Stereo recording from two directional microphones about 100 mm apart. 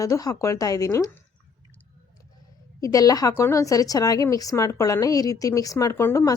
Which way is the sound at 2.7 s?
35° left (ahead or behind).